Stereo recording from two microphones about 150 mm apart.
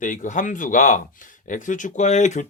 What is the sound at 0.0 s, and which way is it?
A man's voice, 60° left (ahead or behind).